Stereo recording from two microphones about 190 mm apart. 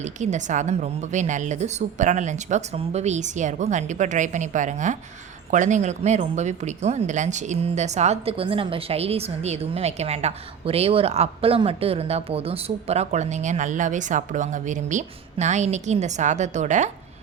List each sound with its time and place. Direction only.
0.0 s speech: 40° right (ahead or behind)